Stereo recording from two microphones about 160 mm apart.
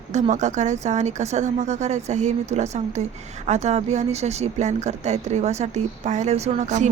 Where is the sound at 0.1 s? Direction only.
50° right (ahead or behind).